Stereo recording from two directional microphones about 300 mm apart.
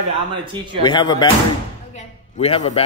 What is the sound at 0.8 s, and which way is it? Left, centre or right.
A man's voice, centre.